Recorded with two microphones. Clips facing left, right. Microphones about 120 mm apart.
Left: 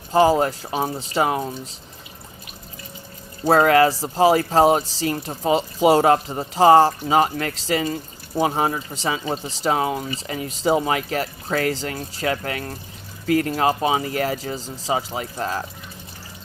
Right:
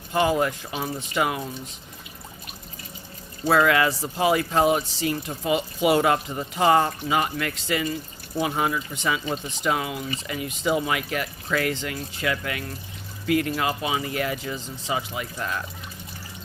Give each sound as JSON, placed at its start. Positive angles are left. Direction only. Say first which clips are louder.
{"t": 0.1, "sound": "speech", "louder": "left 5 dB", "side_deg": 35}
{"t": 3.4, "sound": "speech", "louder": "left 5 dB", "side_deg": 40}